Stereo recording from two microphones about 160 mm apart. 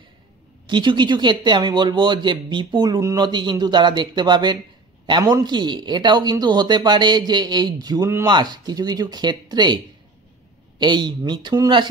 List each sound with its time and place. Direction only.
0.7 s speech: 30° right (ahead or behind)
10.8 s speech: 30° right (ahead or behind)